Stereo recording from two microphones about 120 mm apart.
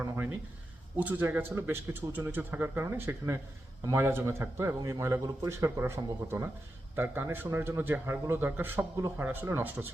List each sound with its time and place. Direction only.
0.9 s a man's voice: 15° right (ahead or behind)